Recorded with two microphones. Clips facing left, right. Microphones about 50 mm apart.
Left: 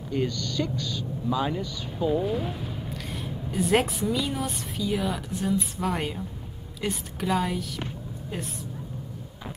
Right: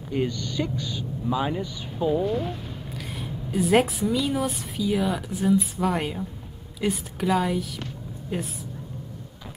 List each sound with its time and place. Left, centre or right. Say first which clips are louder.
0.1 s speech: right 1 dB; centre
1.9 s speech: right 2 dB; centre